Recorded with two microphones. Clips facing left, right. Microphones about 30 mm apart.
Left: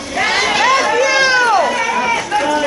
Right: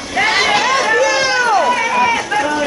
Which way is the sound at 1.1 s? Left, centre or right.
Left.